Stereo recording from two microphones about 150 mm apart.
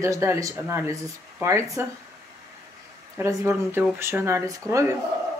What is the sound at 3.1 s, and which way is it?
Speech, 15° right (ahead or behind).